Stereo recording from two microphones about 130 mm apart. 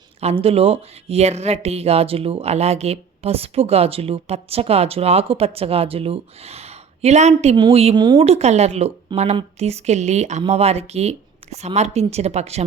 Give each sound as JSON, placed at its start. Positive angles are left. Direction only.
{"t": 0.2, "sound": "speech", "side_deg": -50}
{"t": 7.9, "sound": "speech", "side_deg": -30}
{"t": 8.2, "sound": "speech", "side_deg": -55}